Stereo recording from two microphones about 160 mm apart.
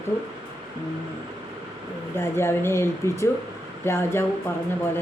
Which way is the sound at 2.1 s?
15° left (ahead or behind).